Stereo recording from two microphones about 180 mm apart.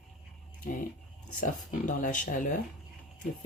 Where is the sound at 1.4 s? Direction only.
45° left (ahead or behind).